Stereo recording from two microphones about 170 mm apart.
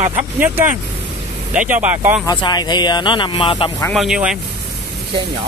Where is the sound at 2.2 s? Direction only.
25° left (ahead or behind).